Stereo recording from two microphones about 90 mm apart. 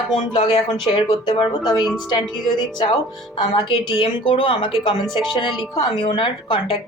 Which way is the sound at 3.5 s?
65° left (ahead or behind).